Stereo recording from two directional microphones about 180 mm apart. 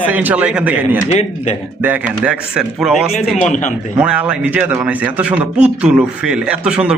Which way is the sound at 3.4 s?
40° left (ahead or behind).